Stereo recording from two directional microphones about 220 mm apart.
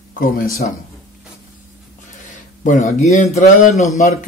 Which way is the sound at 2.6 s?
35° left (ahead or behind).